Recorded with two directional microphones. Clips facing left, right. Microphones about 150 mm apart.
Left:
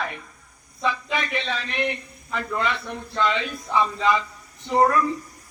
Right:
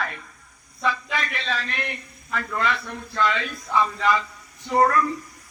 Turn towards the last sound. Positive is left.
turn(degrees=15)  # may be behind; listen again after turning